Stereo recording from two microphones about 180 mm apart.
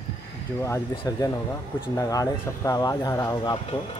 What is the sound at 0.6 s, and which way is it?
Speech, 15° left (ahead or behind).